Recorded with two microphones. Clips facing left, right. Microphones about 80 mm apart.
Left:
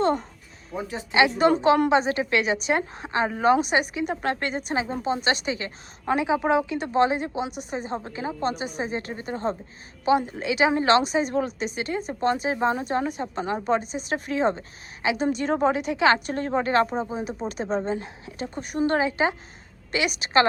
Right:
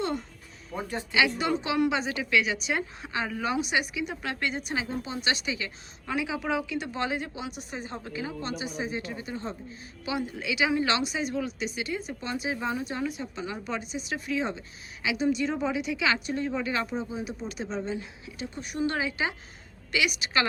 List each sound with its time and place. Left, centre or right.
0.0 s speech: left
0.7 s speech: centre
1.4 s a woman's voice: left